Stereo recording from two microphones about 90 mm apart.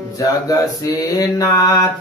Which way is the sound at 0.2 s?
40° left (ahead or behind).